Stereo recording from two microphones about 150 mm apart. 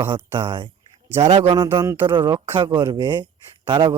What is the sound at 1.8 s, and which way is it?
Speech, 20° right (ahead or behind).